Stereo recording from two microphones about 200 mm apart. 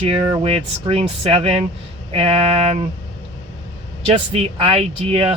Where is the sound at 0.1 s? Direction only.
30° right (ahead or behind).